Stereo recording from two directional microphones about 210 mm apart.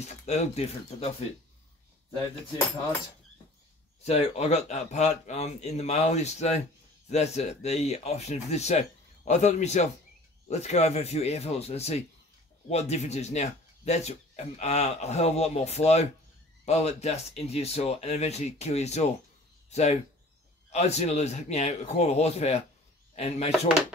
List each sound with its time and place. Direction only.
0.0 s speech: 30° left (ahead or behind)
4.0 s speech: 30° left (ahead or behind)